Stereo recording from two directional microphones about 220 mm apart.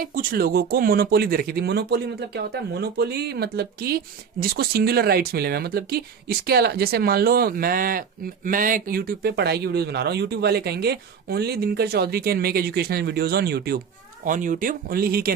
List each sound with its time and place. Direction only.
0.0 s speech: 40° right (ahead or behind)